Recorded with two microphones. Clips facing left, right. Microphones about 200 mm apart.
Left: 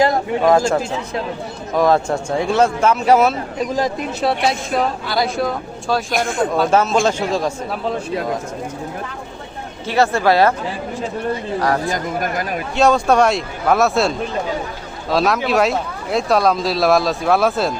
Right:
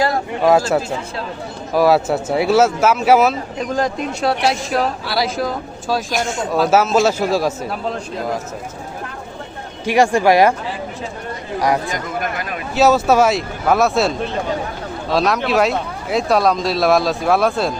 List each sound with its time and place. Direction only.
1.7 s speech: 5° right (ahead or behind)
6.1 s speech: 55° left (ahead or behind)
6.5 s speech: 5° right (ahead or behind)
9.8 s speech: 15° right (ahead or behind)
11.9 s speech: 40° left (ahead or behind)
12.7 s speech: 5° right (ahead or behind)